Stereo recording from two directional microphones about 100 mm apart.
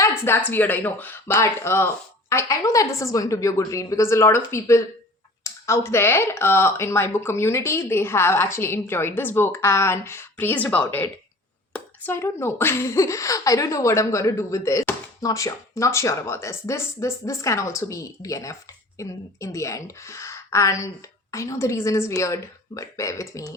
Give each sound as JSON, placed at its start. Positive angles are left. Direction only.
{"t": 0.0, "sound": "speech", "side_deg": 25}